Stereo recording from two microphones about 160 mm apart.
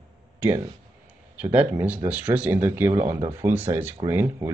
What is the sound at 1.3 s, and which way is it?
Speech, 10° right (ahead or behind).